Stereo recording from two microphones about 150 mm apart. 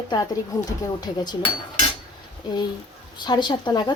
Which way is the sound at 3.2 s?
30° left (ahead or behind).